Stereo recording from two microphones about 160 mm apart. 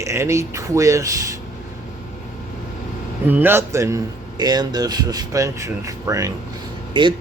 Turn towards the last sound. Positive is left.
turn(degrees=-30)  # may be behind; listen again after turning